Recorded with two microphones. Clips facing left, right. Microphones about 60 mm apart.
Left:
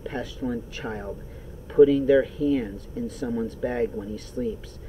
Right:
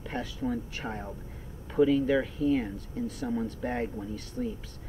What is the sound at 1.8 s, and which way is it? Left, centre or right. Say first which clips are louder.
Speech: left 8 dB; left.